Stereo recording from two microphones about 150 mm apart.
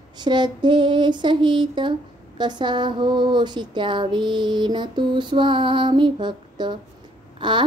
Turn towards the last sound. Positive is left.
turn(degrees=-30)  # may be behind; listen again after turning